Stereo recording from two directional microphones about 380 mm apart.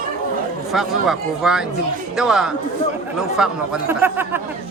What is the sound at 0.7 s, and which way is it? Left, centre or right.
Speech, centre.